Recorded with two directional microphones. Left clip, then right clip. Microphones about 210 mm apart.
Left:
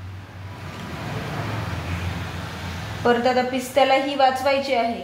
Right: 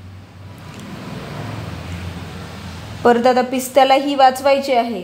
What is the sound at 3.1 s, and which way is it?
A woman's voice, 60° right (ahead or behind).